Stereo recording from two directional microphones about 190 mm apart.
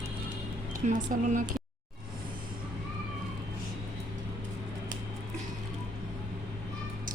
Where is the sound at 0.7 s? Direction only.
45° right (ahead or behind).